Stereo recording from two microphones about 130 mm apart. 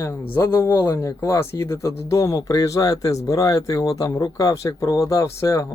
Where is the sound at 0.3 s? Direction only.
20° left (ahead or behind).